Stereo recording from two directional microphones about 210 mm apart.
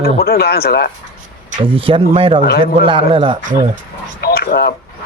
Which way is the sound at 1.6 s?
25° right (ahead or behind).